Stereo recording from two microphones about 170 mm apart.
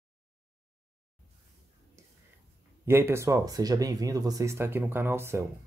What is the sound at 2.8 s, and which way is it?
Speech, 15° right (ahead or behind).